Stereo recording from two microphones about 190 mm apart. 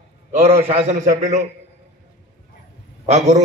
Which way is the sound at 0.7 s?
40° right (ahead or behind).